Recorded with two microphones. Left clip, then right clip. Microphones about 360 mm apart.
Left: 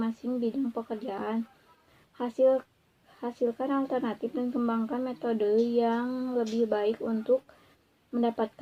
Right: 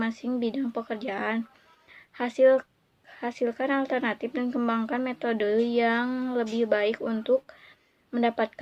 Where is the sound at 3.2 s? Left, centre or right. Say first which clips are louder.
Right 2 dB; right.